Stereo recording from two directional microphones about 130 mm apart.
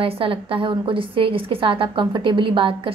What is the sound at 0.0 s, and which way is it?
A woman's voice, 45° right (ahead or behind).